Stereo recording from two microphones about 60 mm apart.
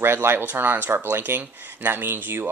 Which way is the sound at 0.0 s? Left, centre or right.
Right.